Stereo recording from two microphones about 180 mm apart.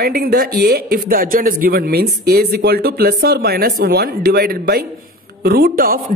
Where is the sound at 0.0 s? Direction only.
60° right (ahead or behind).